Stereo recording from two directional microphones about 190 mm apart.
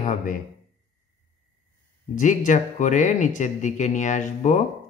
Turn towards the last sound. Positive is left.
turn(degrees=40)  # may be behind; listen again after turning